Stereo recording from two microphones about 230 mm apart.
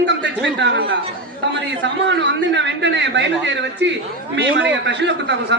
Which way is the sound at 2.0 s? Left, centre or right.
Right.